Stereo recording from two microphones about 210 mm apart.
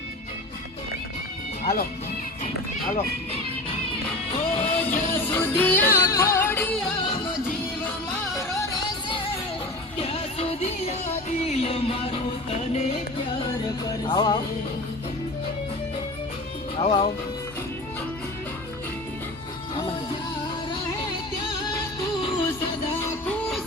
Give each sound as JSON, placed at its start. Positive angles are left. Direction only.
{"t": 1.6, "sound": "speech", "side_deg": 45}
{"t": 4.3, "sound": "music", "side_deg": 25}
{"t": 5.1, "sound": "music", "side_deg": 10}
{"t": 8.4, "sound": "music", "side_deg": 15}
{"t": 16.7, "sound": "speech", "side_deg": 30}
{"t": 22.0, "sound": "music", "side_deg": 25}
{"t": 23.0, "sound": "music", "side_deg": 15}